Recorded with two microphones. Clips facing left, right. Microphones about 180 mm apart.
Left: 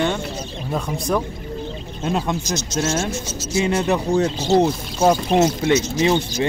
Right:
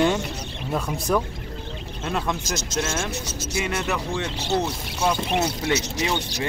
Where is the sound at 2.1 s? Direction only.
25° left (ahead or behind).